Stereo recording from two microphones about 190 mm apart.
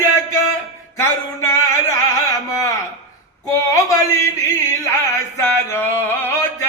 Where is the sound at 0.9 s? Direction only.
15° left (ahead or behind).